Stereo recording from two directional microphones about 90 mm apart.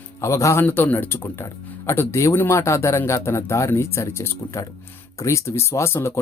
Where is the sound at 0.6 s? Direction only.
20° left (ahead or behind).